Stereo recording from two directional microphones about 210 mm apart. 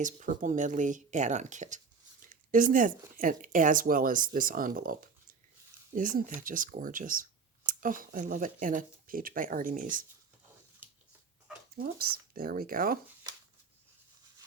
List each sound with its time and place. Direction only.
0.0 s speech: 35° right (ahead or behind)
11.8 s speech: 45° right (ahead or behind)